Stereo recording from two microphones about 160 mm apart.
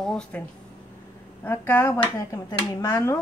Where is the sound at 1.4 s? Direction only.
15° left (ahead or behind).